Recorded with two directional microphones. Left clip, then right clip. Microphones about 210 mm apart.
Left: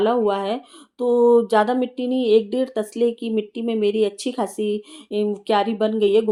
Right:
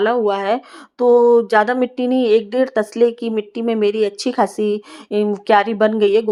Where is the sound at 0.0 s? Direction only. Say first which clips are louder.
Right 3 dB; 20° right (ahead or behind).